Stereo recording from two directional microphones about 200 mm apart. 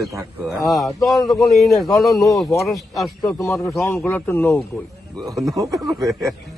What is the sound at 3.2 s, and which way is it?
A man's voice, 15° left (ahead or behind).